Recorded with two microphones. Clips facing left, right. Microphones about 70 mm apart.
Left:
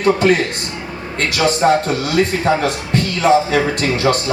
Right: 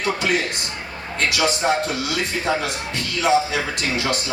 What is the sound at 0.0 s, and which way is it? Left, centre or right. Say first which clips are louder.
Speech: left 8 dB; left.